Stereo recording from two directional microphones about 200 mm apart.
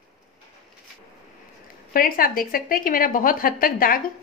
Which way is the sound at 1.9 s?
45° left (ahead or behind).